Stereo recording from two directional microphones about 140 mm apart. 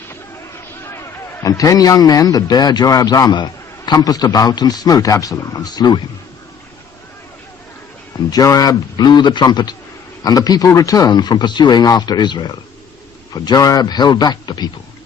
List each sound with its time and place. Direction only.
0.1 s a man's voice: 20° left (ahead or behind)
8.3 s a man's voice: 25° left (ahead or behind)